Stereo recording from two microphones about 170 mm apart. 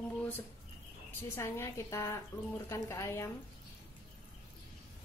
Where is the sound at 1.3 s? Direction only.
15° left (ahead or behind).